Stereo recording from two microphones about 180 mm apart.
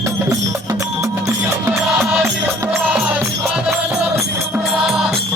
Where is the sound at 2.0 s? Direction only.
5° right (ahead or behind).